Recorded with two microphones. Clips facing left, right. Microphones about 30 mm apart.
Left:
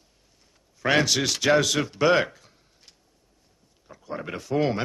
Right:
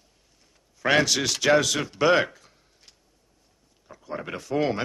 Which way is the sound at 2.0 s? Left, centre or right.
Centre.